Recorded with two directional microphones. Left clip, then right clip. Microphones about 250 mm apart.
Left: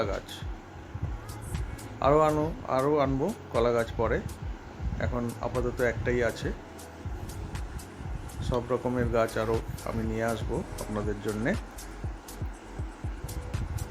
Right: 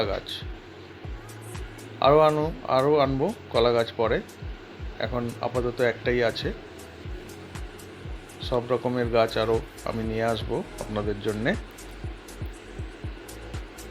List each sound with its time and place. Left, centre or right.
0.0 s speech: centre
1.5 s speech: centre
8.4 s speech: centre